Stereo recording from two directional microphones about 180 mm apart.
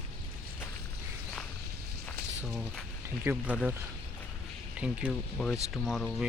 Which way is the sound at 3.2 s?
10° right (ahead or behind).